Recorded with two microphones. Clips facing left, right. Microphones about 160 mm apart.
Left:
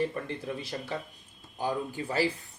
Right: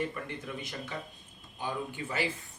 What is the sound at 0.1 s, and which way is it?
Speech, 35° left (ahead or behind).